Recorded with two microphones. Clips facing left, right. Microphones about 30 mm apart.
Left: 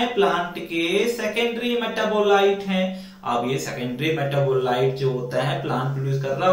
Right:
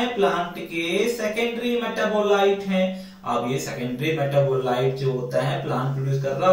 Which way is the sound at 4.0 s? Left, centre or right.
Centre.